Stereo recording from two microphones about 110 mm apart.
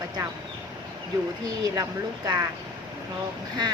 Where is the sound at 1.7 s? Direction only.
35° right (ahead or behind).